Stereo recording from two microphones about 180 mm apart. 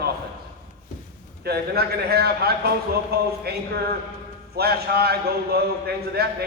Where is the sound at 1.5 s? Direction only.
60° right (ahead or behind).